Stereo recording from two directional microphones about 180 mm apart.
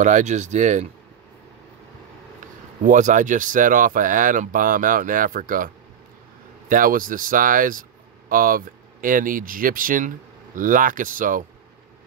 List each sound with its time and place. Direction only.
0.0 s speech: 40° right (ahead or behind)
2.8 s speech: 45° right (ahead or behind)
6.7 s speech: 50° right (ahead or behind)